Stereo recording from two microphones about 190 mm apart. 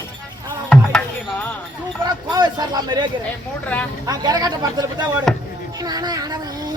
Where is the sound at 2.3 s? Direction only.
20° right (ahead or behind).